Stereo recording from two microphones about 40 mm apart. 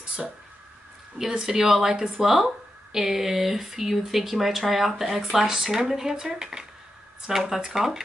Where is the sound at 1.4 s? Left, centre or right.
Centre.